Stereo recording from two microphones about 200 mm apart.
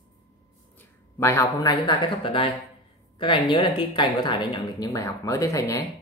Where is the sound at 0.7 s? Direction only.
15° left (ahead or behind).